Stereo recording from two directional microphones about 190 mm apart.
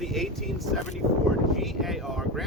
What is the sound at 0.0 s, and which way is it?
Speech, centre (ahead or behind).